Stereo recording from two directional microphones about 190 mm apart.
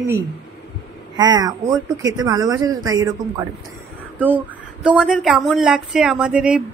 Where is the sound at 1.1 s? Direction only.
20° right (ahead or behind).